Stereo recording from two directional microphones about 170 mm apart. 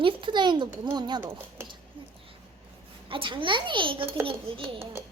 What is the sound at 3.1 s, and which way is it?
A child's voice, 30° right (ahead or behind).